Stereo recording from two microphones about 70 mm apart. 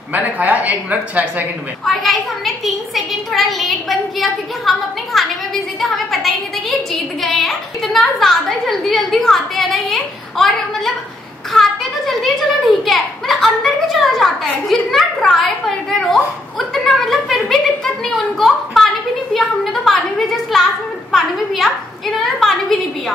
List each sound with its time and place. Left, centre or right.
0.1 s speech: right
1.9 s a child's voice: centre